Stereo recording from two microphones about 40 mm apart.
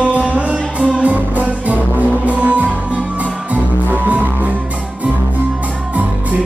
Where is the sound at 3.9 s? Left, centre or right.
Right.